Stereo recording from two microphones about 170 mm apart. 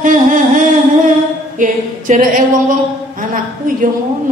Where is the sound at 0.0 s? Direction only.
50° right (ahead or behind).